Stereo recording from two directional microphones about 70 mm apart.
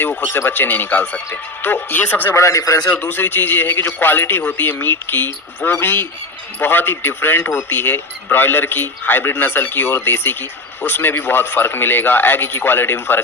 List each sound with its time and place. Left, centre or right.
0.0 s a man's voice: left
2.3 s a man's voice: left
2.9 s a man's voice: left